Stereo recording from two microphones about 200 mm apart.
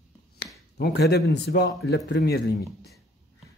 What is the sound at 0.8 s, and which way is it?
A man's voice, 55° left (ahead or behind).